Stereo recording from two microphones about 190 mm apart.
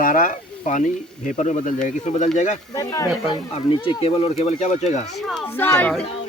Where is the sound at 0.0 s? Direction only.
45° left (ahead or behind).